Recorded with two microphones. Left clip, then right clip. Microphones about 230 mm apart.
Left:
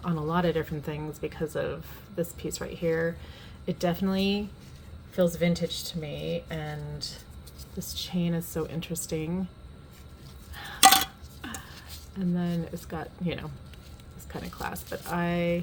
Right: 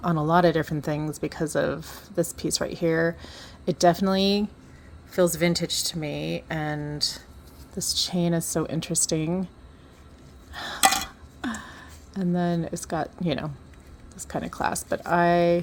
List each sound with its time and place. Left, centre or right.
0.0 s speech: right
10.5 s a sound: right
12.1 s speech: right